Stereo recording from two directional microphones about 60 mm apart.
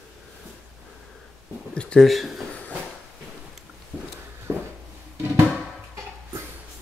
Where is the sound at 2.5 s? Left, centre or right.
Left.